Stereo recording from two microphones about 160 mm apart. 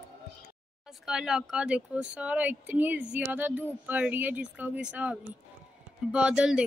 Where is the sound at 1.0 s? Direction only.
5° right (ahead or behind).